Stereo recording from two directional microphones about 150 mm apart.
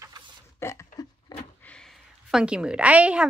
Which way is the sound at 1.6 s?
5° left (ahead or behind).